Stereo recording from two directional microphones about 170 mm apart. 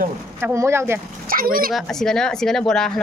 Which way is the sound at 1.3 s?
60° right (ahead or behind).